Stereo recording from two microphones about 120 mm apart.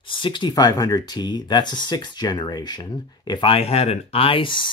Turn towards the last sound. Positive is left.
turn(degrees=45)  # may be behind; listen again after turning